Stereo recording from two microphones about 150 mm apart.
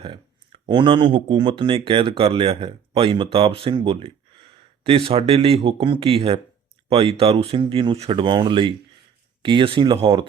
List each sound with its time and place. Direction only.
0.0 s speech: 35° right (ahead or behind)